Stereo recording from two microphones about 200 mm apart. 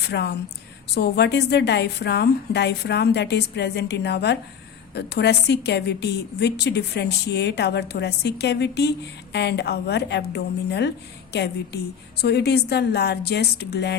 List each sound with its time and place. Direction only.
0.0 s a woman's voice: 55° left (ahead or behind)